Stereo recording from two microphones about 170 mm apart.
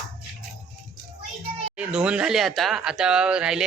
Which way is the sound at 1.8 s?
5° right (ahead or behind).